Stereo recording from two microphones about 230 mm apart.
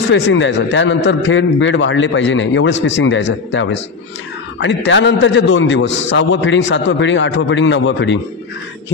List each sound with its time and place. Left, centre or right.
0.1 s a man's voice: left